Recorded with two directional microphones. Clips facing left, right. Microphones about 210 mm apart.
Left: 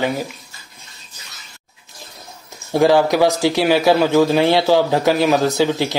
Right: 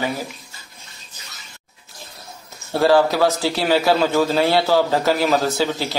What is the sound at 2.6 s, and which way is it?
A man's voice, 15° left (ahead or behind).